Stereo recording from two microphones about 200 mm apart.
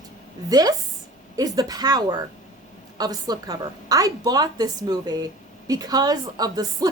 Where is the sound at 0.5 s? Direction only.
20° right (ahead or behind).